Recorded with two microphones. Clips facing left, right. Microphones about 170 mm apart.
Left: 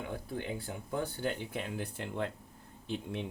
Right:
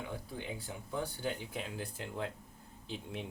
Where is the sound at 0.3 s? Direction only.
55° left (ahead or behind).